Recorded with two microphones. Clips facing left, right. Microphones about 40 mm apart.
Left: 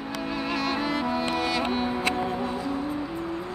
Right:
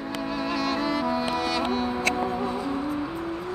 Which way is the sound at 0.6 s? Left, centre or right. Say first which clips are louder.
Right 1 dB; centre.